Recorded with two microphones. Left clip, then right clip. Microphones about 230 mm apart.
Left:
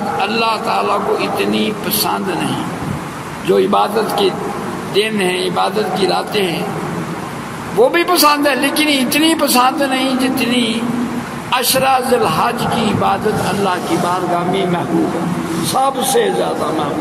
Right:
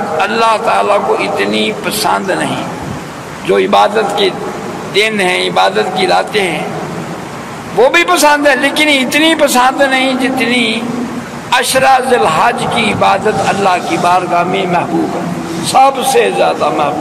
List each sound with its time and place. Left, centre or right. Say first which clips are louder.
0.2 s a man's voice: right 7 dB; left
3.4 s a man's voice: right 4 dB; left
7.8 s a man's voice: right 4 dB; left
13.7 s speech: right 7 dB; left
15.7 s speech: right 7 dB; left